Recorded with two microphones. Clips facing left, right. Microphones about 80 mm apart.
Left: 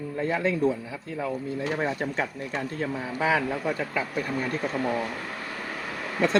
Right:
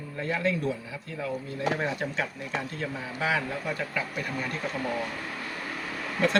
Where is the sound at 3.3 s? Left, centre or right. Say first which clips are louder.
Left 4 dB; left.